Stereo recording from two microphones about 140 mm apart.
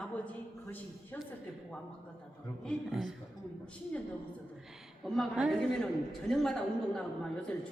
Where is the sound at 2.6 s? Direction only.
Centre (ahead or behind).